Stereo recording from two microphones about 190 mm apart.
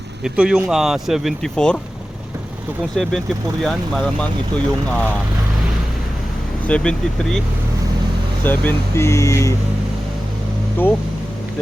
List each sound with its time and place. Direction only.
0.3 s speech: 5° right (ahead or behind)
2.9 s speech: 5° left (ahead or behind)
6.7 s speech: 5° left (ahead or behind)
8.4 s speech: 10° left (ahead or behind)